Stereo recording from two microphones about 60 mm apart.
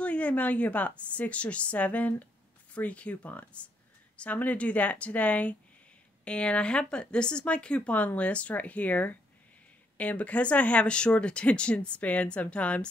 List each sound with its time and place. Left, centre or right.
0.0 s speech: left